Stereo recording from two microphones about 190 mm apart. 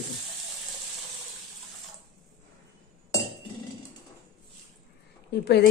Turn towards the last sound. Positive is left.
turn(degrees=60)  # may be behind; listen again after turning